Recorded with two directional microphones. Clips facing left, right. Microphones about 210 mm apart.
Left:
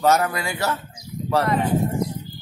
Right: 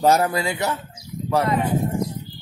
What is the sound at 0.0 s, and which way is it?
A man's voice, 30° right (ahead or behind).